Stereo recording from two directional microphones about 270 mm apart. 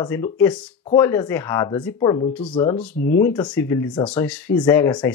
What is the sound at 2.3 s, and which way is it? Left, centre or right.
Speech, centre.